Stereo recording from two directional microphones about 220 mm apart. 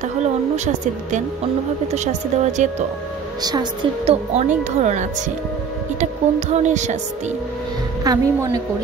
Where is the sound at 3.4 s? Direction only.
20° right (ahead or behind).